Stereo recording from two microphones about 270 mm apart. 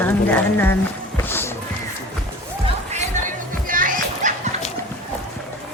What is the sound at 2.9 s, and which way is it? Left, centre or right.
Music, right.